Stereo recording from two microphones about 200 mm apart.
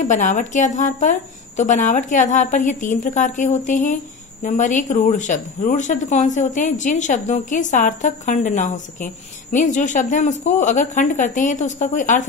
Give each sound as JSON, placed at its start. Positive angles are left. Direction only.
{"t": 0.0, "sound": "speech", "side_deg": 35}